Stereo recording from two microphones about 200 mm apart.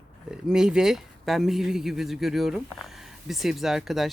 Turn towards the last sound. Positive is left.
turn(degrees=0)  # may be behind; listen again after turning